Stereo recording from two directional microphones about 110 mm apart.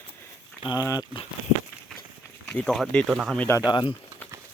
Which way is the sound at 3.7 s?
45° left (ahead or behind).